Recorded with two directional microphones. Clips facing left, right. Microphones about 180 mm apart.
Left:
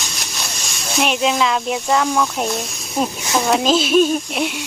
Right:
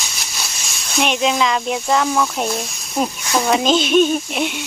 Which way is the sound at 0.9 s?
Centre (ahead or behind).